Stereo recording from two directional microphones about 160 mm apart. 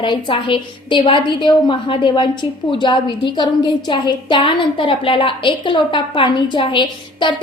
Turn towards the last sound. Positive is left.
turn(degrees=30)  # may be behind; listen again after turning